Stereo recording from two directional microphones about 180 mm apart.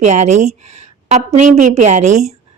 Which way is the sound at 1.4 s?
40° right (ahead or behind).